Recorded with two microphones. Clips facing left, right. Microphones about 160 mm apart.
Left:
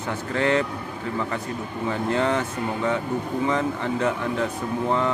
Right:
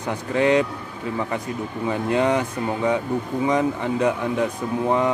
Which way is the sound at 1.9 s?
15° right (ahead or behind).